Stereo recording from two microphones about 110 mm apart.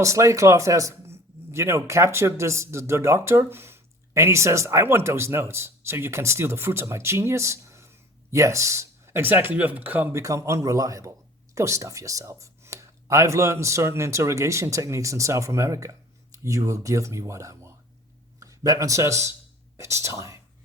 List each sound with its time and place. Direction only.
0.0 s speech: 30° right (ahead or behind)